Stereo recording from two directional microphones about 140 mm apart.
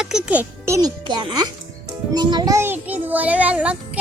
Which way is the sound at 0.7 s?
25° right (ahead or behind).